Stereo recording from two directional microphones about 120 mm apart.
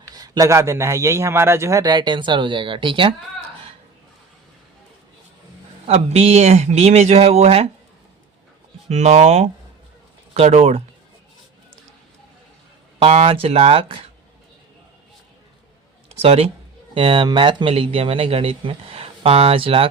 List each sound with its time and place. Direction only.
0.1 s a man's voice: 30° right (ahead or behind)
5.8 s speech: 60° right (ahead or behind)
8.9 s speech: 70° right (ahead or behind)
13.0 s speech: 55° right (ahead or behind)
16.2 s speech: 55° right (ahead or behind)